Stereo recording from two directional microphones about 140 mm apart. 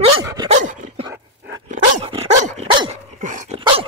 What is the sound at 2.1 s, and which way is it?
Dog, 50° right (ahead or behind).